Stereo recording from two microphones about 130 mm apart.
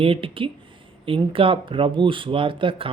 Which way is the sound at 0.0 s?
45° right (ahead or behind).